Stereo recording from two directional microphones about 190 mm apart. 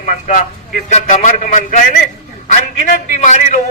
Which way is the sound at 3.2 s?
40° left (ahead or behind).